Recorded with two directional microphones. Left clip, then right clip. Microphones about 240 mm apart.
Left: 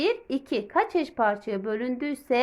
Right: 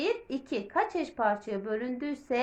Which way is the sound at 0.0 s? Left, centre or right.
Left.